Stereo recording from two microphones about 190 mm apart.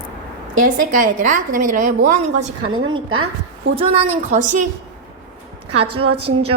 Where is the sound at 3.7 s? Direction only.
30° right (ahead or behind).